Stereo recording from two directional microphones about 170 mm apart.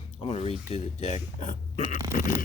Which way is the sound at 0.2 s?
35° left (ahead or behind).